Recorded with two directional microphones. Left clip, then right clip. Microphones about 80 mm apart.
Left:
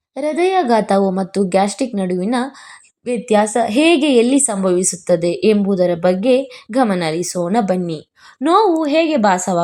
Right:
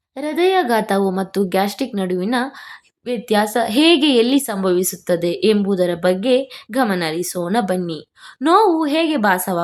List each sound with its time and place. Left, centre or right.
0.2 s a woman's voice: left